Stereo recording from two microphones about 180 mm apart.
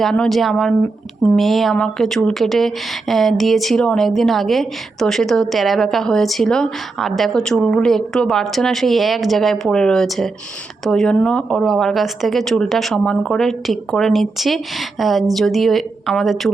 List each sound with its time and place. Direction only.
0.0 s speech: centre (ahead or behind)